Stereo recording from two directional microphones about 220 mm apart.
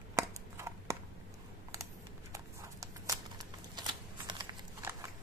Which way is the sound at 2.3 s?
15° right (ahead or behind).